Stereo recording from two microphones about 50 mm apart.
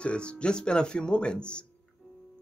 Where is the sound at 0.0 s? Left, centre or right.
Left.